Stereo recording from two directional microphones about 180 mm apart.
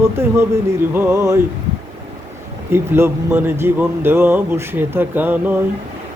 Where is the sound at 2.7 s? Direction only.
15° right (ahead or behind).